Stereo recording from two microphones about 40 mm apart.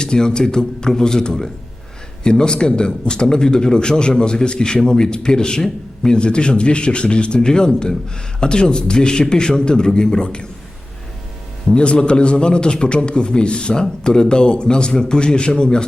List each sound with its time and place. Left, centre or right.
0.0 s a man's voice: centre
11.7 s a man's voice: left